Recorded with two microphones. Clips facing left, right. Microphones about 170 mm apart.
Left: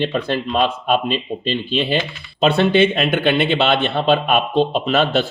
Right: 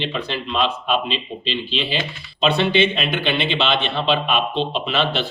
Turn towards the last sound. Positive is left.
turn(degrees=45)  # may be behind; listen again after turning